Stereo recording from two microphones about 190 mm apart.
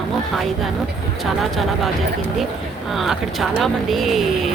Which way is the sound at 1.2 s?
Centre (ahead or behind).